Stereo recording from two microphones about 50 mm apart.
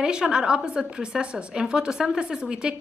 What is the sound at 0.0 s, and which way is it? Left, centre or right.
A woman's voice, centre.